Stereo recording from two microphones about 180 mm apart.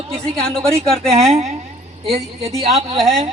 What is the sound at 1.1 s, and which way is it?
Speech, 35° right (ahead or behind).